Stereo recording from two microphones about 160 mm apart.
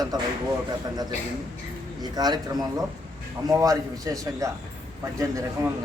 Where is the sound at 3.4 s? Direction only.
20° right (ahead or behind).